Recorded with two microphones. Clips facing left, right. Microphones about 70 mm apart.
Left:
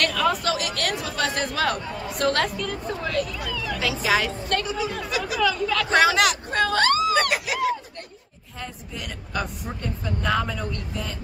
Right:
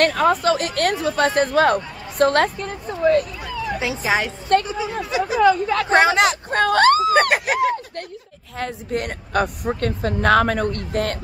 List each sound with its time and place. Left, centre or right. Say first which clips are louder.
0.0 s speech: right 6 dB; right
6.6 s a sound: right 6 dB; right
8.5 s a woman's voice: right 11 dB; right
9.8 s speech: right 7 dB; right